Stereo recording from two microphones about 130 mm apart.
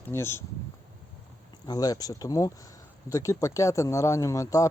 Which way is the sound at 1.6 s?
30° left (ahead or behind).